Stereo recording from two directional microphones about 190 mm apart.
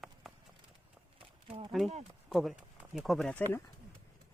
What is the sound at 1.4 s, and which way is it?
Speech, 30° right (ahead or behind).